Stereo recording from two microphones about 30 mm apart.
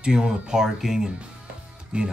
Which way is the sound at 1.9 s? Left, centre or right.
Right.